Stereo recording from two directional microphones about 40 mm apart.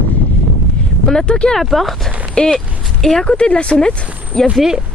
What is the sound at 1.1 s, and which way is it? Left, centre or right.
Speech, centre.